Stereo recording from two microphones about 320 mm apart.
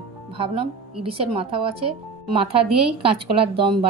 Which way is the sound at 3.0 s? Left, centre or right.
Centre.